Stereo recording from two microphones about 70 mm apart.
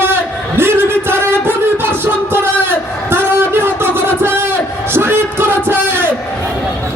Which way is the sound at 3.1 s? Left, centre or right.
Right.